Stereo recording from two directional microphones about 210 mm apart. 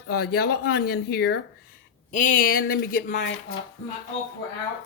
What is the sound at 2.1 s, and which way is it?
Speech, 40° left (ahead or behind).